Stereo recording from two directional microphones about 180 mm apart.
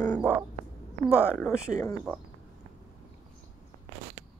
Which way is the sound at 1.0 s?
5° right (ahead or behind).